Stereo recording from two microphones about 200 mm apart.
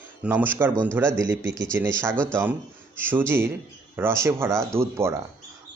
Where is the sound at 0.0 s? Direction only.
10° right (ahead or behind).